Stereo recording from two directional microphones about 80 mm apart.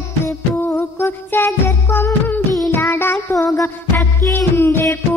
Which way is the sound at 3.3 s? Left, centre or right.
Left.